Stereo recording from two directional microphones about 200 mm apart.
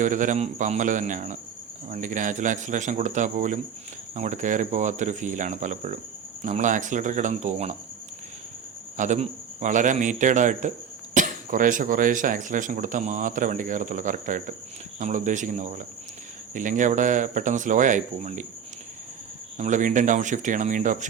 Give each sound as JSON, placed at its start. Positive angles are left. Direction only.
{"t": 0.0, "sound": "speech", "side_deg": -40}
{"t": 9.0, "sound": "speech", "side_deg": -35}
{"t": 19.5, "sound": "speech", "side_deg": -35}